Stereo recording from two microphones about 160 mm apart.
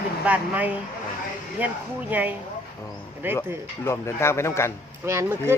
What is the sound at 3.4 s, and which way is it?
Speech, 15° left (ahead or behind).